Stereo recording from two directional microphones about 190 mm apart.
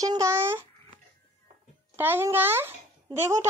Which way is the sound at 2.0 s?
10° right (ahead or behind).